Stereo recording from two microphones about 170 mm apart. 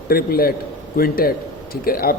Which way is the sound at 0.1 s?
60° left (ahead or behind).